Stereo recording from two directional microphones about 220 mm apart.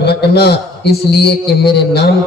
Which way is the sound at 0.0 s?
50° left (ahead or behind).